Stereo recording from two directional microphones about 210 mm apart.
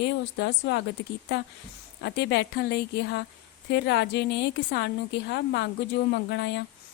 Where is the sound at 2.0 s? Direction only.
55° left (ahead or behind).